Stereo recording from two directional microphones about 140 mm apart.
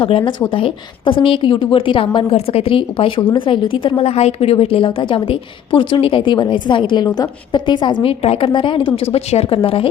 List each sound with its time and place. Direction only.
0.0 s a woman's voice: 40° left (ahead or behind)